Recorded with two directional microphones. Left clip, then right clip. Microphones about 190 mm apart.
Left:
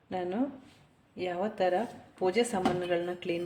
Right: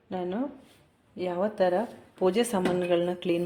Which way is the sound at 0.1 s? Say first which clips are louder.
Right 1 dB; 15° right (ahead or behind).